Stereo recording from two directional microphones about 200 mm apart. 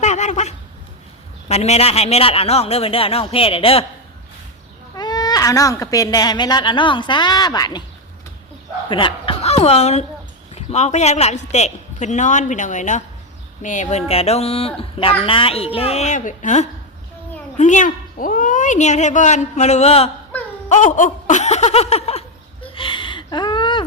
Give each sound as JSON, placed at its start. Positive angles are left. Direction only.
{"t": 0.0, "sound": "a sound", "side_deg": 35}
{"t": 1.5, "sound": "speech", "side_deg": 30}
{"t": 4.9, "sound": "speech", "side_deg": 20}
{"t": 8.9, "sound": "a woman's voice", "side_deg": 25}
{"t": 20.7, "sound": "snicker", "side_deg": 40}
{"t": 22.6, "sound": "a sound", "side_deg": 25}